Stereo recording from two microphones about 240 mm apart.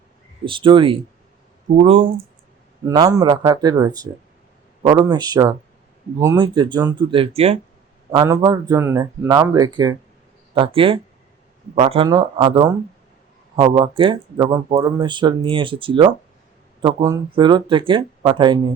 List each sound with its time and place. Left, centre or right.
0.4 s speech: right
2.8 s a man's voice: centre